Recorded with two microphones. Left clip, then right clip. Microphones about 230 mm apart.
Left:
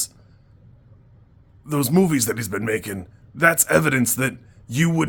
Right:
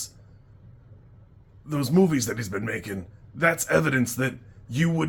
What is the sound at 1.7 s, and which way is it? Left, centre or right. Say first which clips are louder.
Speech: left 3 dB; left.